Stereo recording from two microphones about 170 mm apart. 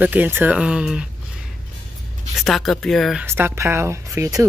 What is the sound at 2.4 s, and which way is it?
Speech, centre (ahead or behind).